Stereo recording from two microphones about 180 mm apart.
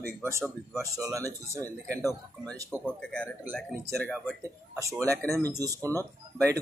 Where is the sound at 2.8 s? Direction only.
5° left (ahead or behind).